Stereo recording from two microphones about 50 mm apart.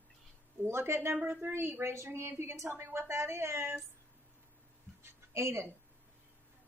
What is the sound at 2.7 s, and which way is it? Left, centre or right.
A woman's voice, right.